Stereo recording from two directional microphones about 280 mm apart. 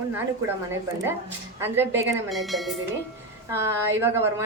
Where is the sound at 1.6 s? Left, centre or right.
Centre.